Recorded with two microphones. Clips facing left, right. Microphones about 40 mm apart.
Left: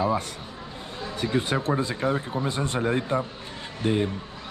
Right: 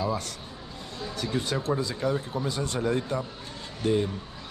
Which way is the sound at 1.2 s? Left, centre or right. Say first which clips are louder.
Left 4 dB; left.